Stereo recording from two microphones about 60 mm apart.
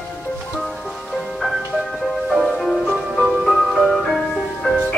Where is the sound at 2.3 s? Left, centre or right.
Centre.